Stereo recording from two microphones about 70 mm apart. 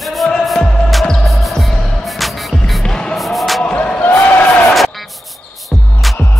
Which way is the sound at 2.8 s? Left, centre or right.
Centre.